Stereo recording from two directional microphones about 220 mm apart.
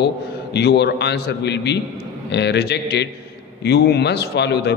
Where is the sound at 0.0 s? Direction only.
50° left (ahead or behind).